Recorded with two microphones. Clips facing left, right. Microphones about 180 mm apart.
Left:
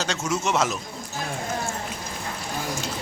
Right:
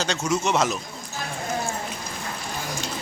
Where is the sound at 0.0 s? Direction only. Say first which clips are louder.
Right 2 dB; 5° left (ahead or behind).